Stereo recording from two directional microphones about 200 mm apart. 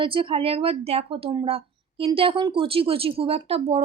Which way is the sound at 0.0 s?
25° right (ahead or behind).